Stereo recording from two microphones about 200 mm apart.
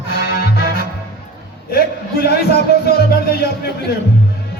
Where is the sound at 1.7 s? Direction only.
50° left (ahead or behind).